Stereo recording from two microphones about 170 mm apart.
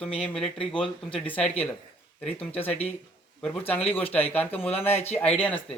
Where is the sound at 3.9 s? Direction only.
10° left (ahead or behind).